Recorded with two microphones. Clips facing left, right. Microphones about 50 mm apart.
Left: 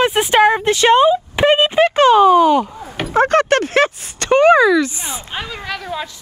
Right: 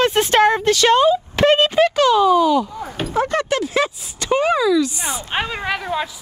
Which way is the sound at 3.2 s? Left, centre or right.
Left.